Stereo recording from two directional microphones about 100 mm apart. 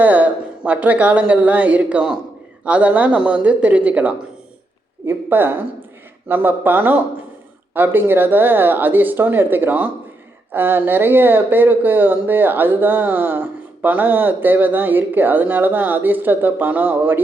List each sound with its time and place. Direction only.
0.0 s speech: 15° right (ahead or behind)